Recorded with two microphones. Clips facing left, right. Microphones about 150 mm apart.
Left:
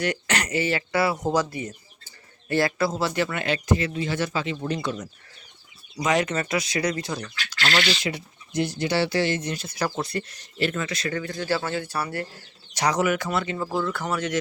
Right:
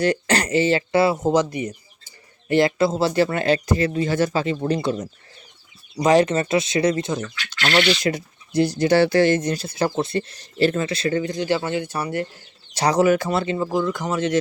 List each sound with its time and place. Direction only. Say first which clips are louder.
0.0 s speech: right 6 dB; 30° right (ahead or behind)
7.6 s speech: right 6 dB; 40° right (ahead or behind)
9.6 s speech: right 5 dB; 25° right (ahead or behind)
12.7 s speech: right 6 dB; 30° right (ahead or behind)
13.6 s a man's voice: right 4 dB; 15° right (ahead or behind)